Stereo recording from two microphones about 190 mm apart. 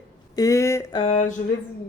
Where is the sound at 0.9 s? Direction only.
35° left (ahead or behind).